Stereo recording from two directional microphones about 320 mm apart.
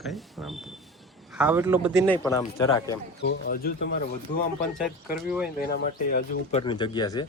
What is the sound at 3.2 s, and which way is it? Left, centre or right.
Speech, left.